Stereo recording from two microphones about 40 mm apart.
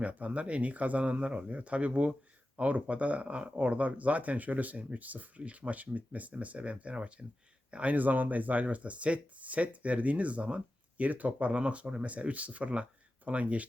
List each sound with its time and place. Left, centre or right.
0.0 s speech: right